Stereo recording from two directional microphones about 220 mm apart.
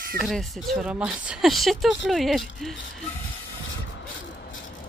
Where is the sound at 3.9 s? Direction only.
60° left (ahead or behind).